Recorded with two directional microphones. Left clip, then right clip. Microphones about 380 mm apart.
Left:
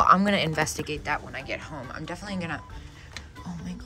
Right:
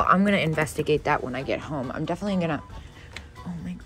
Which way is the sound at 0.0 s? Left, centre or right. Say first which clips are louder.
Left 1 dB; centre.